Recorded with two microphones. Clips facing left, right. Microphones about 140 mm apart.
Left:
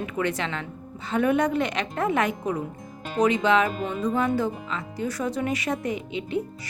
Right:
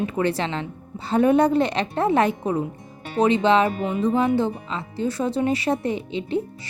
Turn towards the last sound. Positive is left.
turn(degrees=-30)  # may be behind; listen again after turning